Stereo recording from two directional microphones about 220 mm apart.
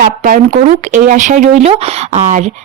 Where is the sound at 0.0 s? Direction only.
35° right (ahead or behind).